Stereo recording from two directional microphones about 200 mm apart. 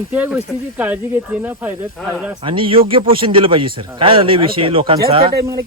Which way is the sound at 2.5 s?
25° right (ahead or behind).